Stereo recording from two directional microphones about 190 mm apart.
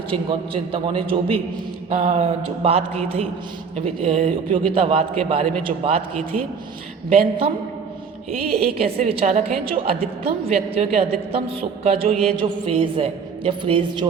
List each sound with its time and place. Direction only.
0.1 s a woman's voice: 25° right (ahead or behind)
1.9 s a man's voice: 40° right (ahead or behind)
8.4 s a man's voice: 30° right (ahead or behind)